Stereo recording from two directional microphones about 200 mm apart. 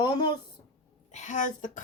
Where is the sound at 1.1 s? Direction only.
40° left (ahead or behind).